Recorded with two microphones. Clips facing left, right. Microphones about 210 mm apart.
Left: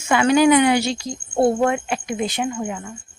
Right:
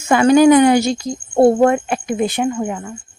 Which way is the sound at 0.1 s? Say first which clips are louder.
Right 5 dB; 45° right (ahead or behind).